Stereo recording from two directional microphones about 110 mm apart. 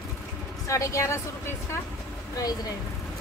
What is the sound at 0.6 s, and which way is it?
Speech, 30° left (ahead or behind).